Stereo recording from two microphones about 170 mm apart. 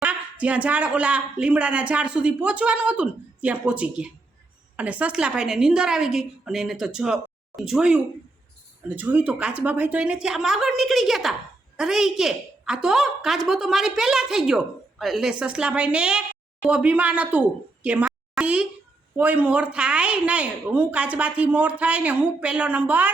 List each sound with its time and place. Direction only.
0.0 s a woman's voice: 10° right (ahead or behind)
17.8 s a sound: 5° right (ahead or behind)
19.1 s speech: 10° right (ahead or behind)